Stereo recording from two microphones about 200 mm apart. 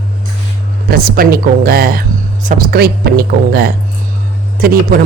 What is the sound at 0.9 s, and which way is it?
Speech, 50° right (ahead or behind).